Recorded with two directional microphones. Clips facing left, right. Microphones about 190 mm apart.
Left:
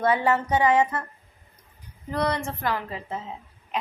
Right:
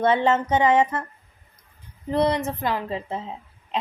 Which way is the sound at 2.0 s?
25° right (ahead or behind).